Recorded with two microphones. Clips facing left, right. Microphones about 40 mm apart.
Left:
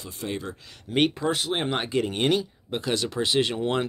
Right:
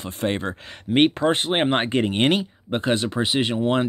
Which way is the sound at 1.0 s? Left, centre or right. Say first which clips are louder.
Right 5 dB; right.